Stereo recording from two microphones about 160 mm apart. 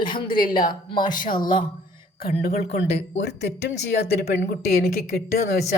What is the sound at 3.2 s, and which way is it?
Speech, 90° left.